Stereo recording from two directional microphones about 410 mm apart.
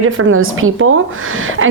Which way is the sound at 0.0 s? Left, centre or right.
Right.